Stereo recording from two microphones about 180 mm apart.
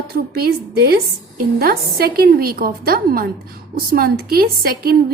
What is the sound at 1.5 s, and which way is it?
Speech, 60° right (ahead or behind).